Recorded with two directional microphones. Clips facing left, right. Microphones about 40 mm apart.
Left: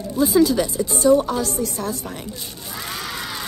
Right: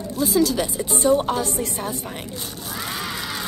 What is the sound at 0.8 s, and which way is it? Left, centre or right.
Speech, right.